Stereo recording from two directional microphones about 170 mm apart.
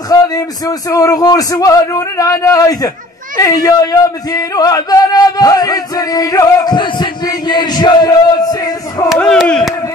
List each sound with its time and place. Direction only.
0.1 s speech: 20° left (ahead or behind)
9.1 s speech: centre (ahead or behind)